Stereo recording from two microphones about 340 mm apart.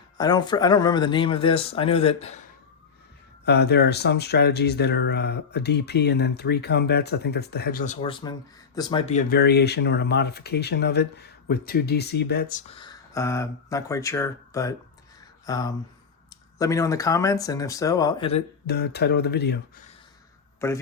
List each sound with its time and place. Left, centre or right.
0.2 s speech: centre
3.4 s speech: left
18.6 s speech: left
20.6 s speech: centre